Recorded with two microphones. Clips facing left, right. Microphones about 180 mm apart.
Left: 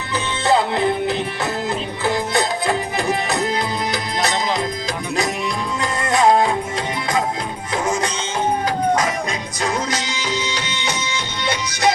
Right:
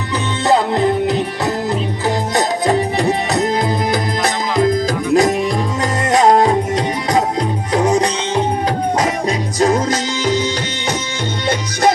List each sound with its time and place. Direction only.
0.4 s music: 40° right (ahead or behind)
7.7 s music: 35° right (ahead or behind)
9.6 s music: 45° right (ahead or behind)
11.4 s music: 50° right (ahead or behind)